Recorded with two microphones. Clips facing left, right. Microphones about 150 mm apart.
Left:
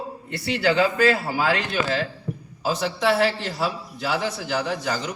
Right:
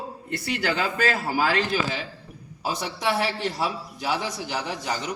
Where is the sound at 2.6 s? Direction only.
90° left.